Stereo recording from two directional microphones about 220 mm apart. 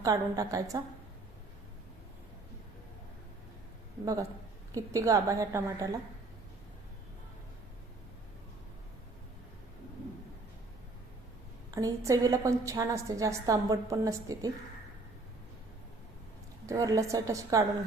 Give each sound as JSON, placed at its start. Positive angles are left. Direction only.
{"t": 0.0, "sound": "a woman's voice", "side_deg": -15}
{"t": 4.0, "sound": "a woman's voice", "side_deg": -15}
{"t": 11.7, "sound": "a woman's voice", "side_deg": -15}
{"t": 16.6, "sound": "a woman's voice", "side_deg": -15}